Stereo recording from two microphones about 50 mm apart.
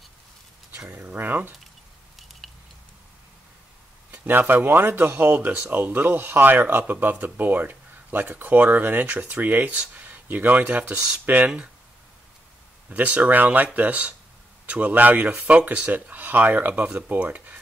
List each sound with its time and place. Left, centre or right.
0.8 s speech: right
2.4 s a sound: centre
4.2 s speech: right
5.3 s speech: right
12.9 s speech: right